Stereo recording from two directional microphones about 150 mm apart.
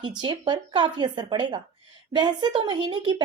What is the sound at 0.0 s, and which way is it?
Speech, 30° right (ahead or behind).